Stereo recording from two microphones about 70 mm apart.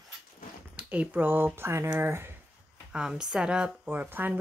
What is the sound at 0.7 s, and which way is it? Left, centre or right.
Speech, right.